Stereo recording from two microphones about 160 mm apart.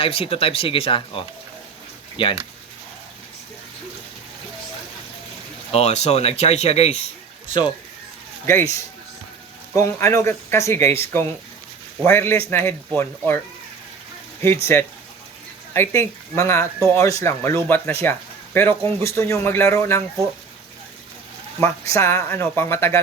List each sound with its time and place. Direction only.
0.0 s speech: 35° left (ahead or behind)
5.7 s speech: 45° left (ahead or behind)
8.4 s a man's voice: 15° left (ahead or behind)
9.7 s a man's voice: 20° left (ahead or behind)
14.4 s a man's voice: 15° left (ahead or behind)
21.6 s a man's voice: 20° left (ahead or behind)